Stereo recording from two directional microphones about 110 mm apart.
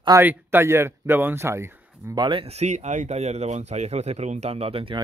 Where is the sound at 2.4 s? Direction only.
80° right; by 5.0 s 55° right (ahead or behind).